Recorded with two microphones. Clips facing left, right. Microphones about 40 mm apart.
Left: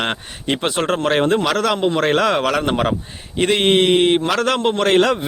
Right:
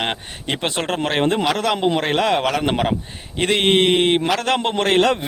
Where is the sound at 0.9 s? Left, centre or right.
Centre.